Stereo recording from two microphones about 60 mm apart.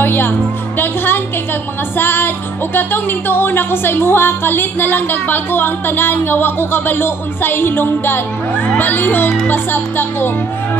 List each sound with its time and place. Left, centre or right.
0.0 s speech: left